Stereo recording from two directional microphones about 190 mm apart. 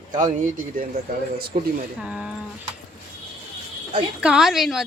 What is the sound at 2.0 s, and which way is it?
Speech, 5° right (ahead or behind).